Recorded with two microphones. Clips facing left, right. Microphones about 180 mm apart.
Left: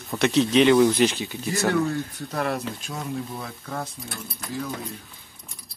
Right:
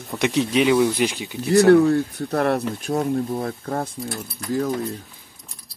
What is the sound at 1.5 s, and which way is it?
Speech, 60° right (ahead or behind).